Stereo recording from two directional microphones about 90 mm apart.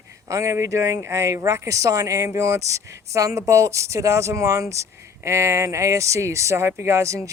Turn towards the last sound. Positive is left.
turn(degrees=-35)  # may be behind; listen again after turning